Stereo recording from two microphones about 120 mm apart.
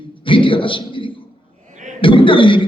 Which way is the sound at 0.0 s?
45° left (ahead or behind).